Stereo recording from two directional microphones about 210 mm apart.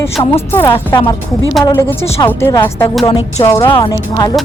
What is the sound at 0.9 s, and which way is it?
Speech, 20° left (ahead or behind).